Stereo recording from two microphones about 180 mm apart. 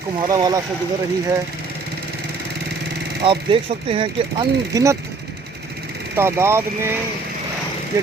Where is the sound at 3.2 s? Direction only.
30° right (ahead or behind).